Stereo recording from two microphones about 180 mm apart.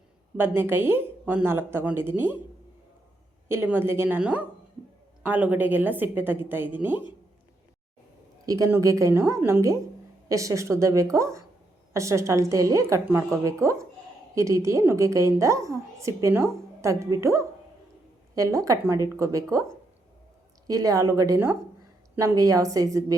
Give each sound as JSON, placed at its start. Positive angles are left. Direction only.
{"t": 0.3, "sound": "a woman's voice", "side_deg": -10}
{"t": 3.5, "sound": "a woman's voice", "side_deg": -10}
{"t": 8.4, "sound": "a woman's voice", "side_deg": -20}
{"t": 20.7, "sound": "a woman's voice", "side_deg": -20}